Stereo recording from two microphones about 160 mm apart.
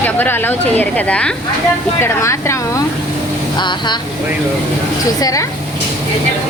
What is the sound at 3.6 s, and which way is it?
Speech, 30° left (ahead or behind).